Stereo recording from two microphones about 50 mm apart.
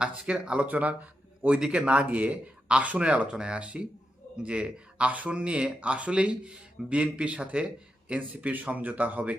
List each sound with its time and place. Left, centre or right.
0.0 s speech: centre
1.5 s speech: centre